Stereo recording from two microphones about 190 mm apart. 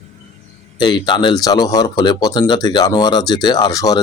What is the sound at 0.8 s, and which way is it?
Speech, 25° left (ahead or behind).